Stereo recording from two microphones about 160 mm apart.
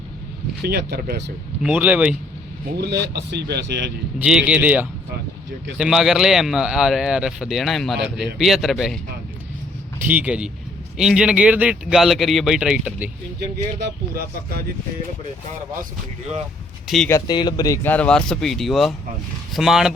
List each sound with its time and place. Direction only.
0.6 s speech: 80° right
1.6 s speech: 10° right (ahead or behind)
2.7 s speech: 90° right
4.2 s speech: 5° right (ahead or behind)
10.0 s speech: 10° right (ahead or behind)
16.8 s speech: centre (ahead or behind)
17.1 s speech: 20° left (ahead or behind)
17.8 s speech: 10° left (ahead or behind)